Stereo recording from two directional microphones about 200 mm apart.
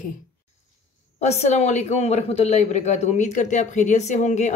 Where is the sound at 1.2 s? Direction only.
35° left (ahead or behind).